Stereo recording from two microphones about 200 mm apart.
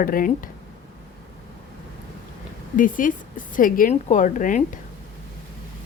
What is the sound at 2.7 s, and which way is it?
A woman's voice, 40° left (ahead or behind).